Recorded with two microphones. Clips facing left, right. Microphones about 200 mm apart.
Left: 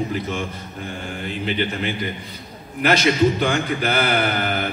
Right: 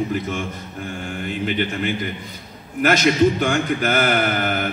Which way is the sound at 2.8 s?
45° right (ahead or behind).